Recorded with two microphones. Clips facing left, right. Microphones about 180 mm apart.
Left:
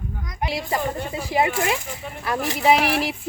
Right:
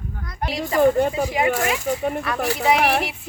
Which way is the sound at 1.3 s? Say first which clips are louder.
Right 1 dB; 30° left (ahead or behind).